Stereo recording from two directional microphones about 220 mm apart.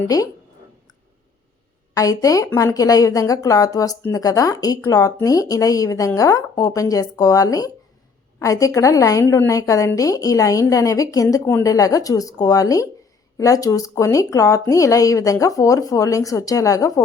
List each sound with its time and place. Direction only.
0.1 s a woman's voice: 15° left (ahead or behind)
2.0 s a woman's voice: 15° left (ahead or behind)